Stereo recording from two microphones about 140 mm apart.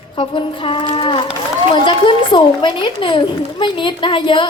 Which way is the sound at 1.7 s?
35° left (ahead or behind).